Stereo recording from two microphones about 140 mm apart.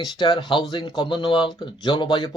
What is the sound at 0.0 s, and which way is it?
Speech, 30° left (ahead or behind).